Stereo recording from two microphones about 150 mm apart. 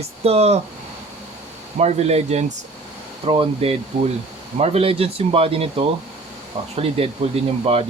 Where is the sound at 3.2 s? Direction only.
35° right (ahead or behind).